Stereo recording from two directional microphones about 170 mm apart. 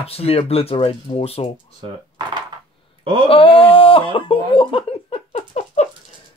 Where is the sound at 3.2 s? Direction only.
30° left (ahead or behind).